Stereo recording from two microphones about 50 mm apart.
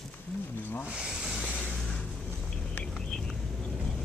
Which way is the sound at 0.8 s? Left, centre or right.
Centre.